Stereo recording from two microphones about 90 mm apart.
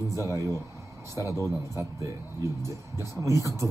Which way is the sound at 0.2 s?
35° right (ahead or behind).